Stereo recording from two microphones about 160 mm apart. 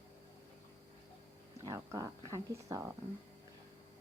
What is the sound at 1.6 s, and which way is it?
A woman's voice, 20° right (ahead or behind).